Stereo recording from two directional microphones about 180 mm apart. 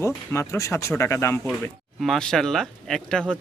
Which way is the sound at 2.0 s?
Centre (ahead or behind).